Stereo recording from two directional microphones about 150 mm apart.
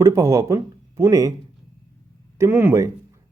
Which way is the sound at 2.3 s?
15° right (ahead or behind).